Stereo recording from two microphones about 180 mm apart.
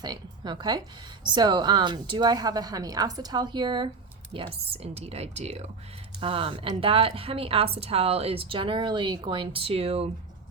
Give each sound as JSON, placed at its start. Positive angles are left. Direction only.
{"t": 0.0, "sound": "a woman's voice", "side_deg": -25}